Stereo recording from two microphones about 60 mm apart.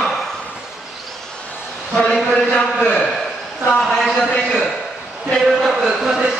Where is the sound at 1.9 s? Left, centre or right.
Centre.